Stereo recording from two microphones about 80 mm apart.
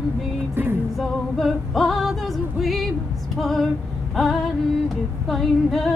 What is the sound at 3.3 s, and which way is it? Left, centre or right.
Female singing, centre.